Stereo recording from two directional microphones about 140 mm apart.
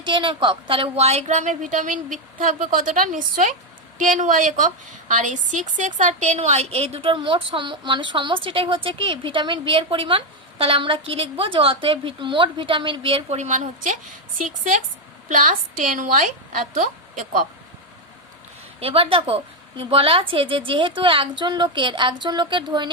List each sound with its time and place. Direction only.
0.0 s a woman's voice: 35° right (ahead or behind); by 17.4 s 70° right (ahead or behind)
18.8 s a woman's voice: 40° right (ahead or behind)